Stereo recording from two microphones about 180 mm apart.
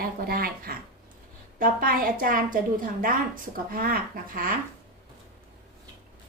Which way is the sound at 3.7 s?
55° right (ahead or behind).